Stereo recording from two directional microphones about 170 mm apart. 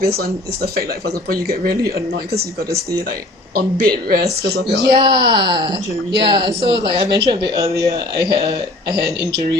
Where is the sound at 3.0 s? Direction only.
60° right (ahead or behind).